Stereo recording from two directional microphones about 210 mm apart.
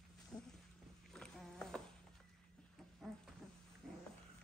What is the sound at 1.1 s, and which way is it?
Insect, 5° left (ahead or behind).